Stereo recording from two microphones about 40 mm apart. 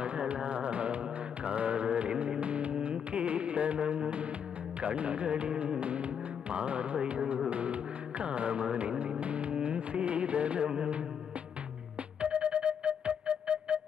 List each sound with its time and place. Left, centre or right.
0.0 s a sound: right
1.4 s mantra: right
2.4 s music: right
12.2 s music: right